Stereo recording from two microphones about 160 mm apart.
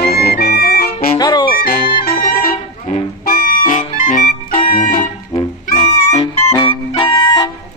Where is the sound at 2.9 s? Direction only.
60° left (ahead or behind).